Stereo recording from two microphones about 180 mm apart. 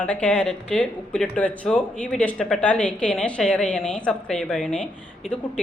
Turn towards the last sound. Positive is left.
turn(degrees=5)  # may be behind; listen again after turning